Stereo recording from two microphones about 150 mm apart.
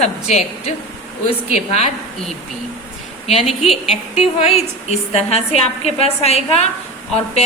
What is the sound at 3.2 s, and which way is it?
A woman's voice, 45° left (ahead or behind).